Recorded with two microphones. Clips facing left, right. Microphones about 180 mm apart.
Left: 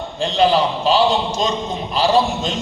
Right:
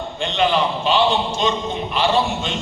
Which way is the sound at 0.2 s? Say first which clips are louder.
Left 3 dB; 35° left (ahead or behind).